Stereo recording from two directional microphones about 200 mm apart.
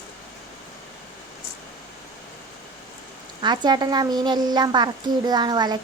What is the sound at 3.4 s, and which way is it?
A woman's voice, 20° right (ahead or behind).